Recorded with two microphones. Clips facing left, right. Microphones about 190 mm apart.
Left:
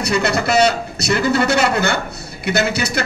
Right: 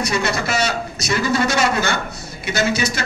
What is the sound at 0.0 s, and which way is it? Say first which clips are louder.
A man's voice: left 3 dB; 65° left (ahead or behind).